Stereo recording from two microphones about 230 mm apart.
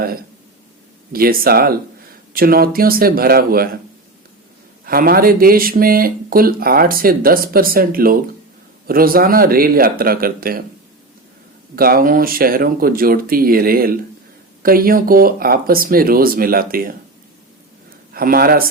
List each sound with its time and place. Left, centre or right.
1.1 s speech: right
4.9 s speech: right
11.8 s speech: right
18.1 s speech: right